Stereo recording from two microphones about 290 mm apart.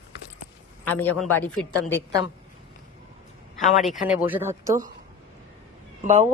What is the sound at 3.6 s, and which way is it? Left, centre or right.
Speech, centre.